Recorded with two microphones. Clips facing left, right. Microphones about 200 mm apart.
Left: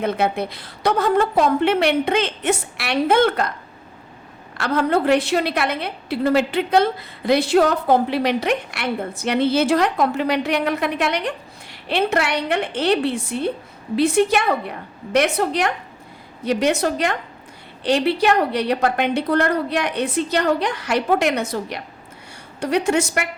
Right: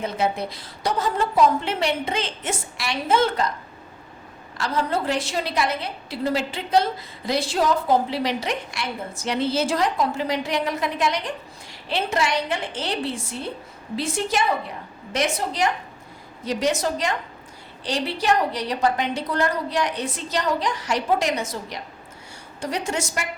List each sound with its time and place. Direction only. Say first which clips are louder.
0.0 s a woman's voice: left 4 dB; 60° left (ahead or behind)
4.5 s a woman's voice: left 5 dB; 60° left (ahead or behind)